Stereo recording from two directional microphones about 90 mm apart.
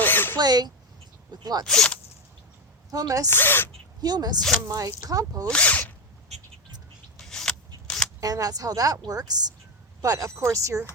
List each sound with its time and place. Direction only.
0.0 s a sound: 20° left (ahead or behind)
0.3 s speech: 50° right (ahead or behind)
1.6 s speech: 5° left (ahead or behind)
2.9 s speech: 40° right (ahead or behind)
3.2 s speech: 25° left (ahead or behind)
4.0 s speech: 50° right (ahead or behind)
4.7 s speech: 40° right (ahead or behind)
5.5 s speech: 15° left (ahead or behind)
7.2 s vehicle: 5° left (ahead or behind)
8.2 s speech: 45° right (ahead or behind)